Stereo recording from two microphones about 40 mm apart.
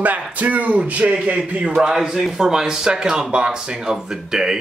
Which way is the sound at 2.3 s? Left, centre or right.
Centre.